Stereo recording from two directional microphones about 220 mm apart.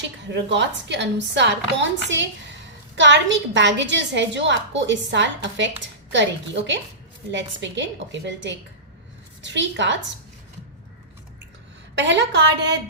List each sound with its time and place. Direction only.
0.3 s a woman's voice: 55° right (ahead or behind)
11.9 s a woman's voice: 55° right (ahead or behind)